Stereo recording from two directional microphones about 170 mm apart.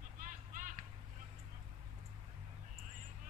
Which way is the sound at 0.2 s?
50° right (ahead or behind).